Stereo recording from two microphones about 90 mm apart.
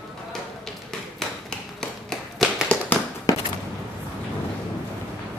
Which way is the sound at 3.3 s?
40° left (ahead or behind).